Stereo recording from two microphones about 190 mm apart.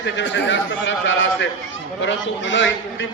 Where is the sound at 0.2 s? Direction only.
70° left (ahead or behind).